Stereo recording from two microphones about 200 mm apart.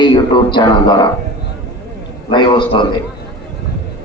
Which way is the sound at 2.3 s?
25° left (ahead or behind).